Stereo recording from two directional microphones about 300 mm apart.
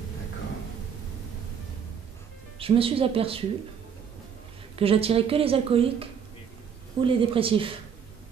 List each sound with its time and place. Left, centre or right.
2.6 s speech: centre
4.7 s speech: centre